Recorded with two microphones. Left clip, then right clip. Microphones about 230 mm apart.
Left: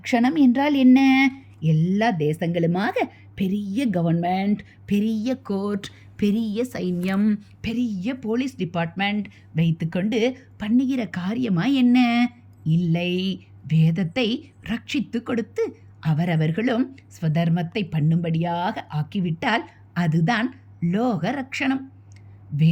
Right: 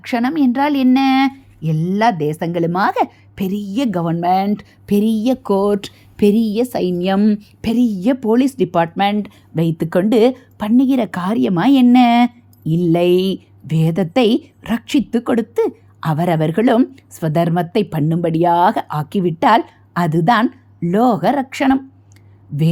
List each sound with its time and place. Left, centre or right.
0.0 s a woman's voice: centre
22.5 s speech: right